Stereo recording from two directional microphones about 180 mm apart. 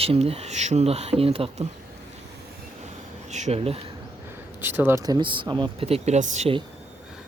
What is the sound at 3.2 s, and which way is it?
Insect, 40° right (ahead or behind).